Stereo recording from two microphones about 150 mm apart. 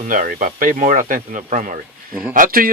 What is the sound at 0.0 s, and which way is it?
Speech, 65° right (ahead or behind).